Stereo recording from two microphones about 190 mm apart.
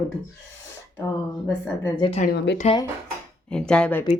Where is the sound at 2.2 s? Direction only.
65° left (ahead or behind).